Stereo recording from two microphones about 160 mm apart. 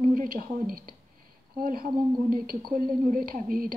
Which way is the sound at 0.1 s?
60° right (ahead or behind).